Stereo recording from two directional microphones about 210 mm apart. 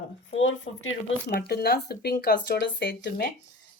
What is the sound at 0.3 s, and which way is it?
Speech, 65° left (ahead or behind).